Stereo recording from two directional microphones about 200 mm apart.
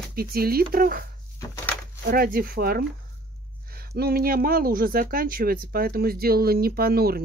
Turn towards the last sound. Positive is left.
turn(degrees=-50)  # may be behind; listen again after turning